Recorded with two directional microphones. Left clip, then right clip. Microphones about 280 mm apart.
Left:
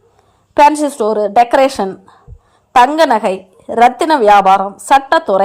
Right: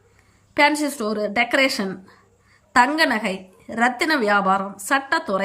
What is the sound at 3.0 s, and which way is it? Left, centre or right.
A woman's voice, left.